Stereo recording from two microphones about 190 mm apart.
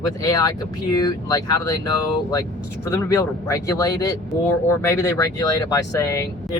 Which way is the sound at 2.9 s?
15° left (ahead or behind).